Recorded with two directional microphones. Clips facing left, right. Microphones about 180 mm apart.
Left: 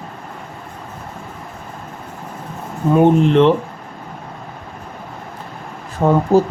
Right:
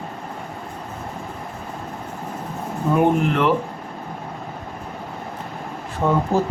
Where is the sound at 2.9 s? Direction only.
25° left (ahead or behind).